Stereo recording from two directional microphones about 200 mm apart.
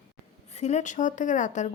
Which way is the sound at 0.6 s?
35° left (ahead or behind).